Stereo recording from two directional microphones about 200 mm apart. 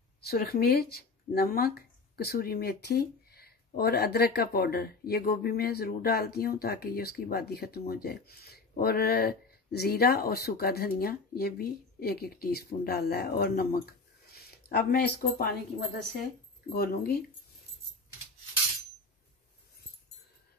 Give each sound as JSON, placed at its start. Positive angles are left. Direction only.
{"t": 0.3, "sound": "speech", "side_deg": 50}
{"t": 16.7, "sound": "speech", "side_deg": 50}